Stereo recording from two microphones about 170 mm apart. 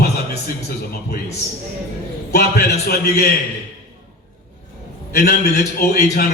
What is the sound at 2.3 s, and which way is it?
Speech, 70° left (ahead or behind).